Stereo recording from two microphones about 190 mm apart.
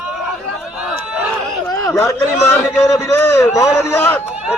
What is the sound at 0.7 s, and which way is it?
Run, 5° right (ahead or behind).